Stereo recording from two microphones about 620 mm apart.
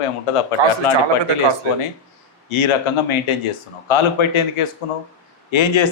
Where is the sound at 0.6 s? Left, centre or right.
Right.